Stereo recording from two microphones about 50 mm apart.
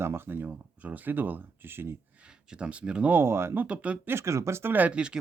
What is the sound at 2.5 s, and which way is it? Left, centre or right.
Speech, right.